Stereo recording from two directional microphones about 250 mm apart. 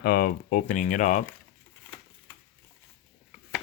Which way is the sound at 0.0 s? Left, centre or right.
Left.